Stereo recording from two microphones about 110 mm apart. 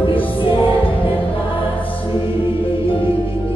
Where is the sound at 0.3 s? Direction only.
50° left (ahead or behind).